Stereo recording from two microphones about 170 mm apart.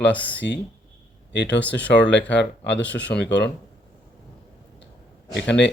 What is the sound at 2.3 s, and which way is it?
Speech, 90° left.